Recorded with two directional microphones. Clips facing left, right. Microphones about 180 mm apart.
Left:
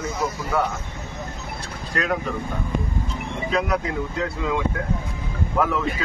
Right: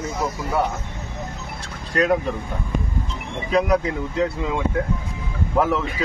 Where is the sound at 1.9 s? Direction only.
30° right (ahead or behind).